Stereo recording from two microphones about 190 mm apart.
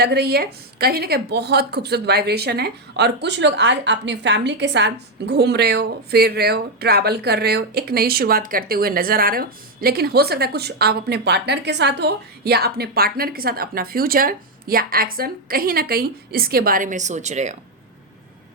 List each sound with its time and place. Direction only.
0.0 s a woman's voice: 55° right (ahead or behind); by 17.5 s 40° right (ahead or behind)